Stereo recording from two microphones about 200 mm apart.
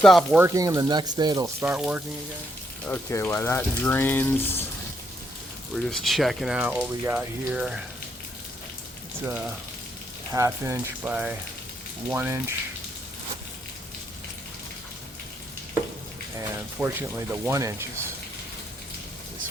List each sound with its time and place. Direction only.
0.0 s speech: centre (ahead or behind)
0.4 s speech: 15° right (ahead or behind)
1.6 s speech: 5° right (ahead or behind)
2.8 s speech: 10° left (ahead or behind)
5.7 s speech: centre (ahead or behind)
9.2 s speech: 5° right (ahead or behind)
16.8 s speech: 10° right (ahead or behind)